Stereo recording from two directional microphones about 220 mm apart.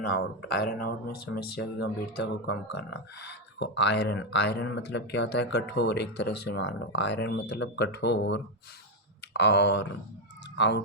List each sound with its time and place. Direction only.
0.0 s speech: 50° left (ahead or behind)